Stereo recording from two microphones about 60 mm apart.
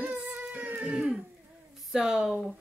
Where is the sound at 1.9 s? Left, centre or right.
Centre.